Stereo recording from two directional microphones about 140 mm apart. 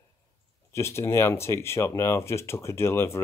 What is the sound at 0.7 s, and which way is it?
Speech, 20° left (ahead or behind).